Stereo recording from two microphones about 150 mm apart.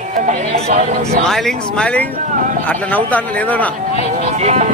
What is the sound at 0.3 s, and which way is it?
Speech, 55° right (ahead or behind).